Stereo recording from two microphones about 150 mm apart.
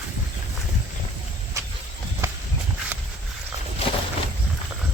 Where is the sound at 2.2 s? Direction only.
15° right (ahead or behind).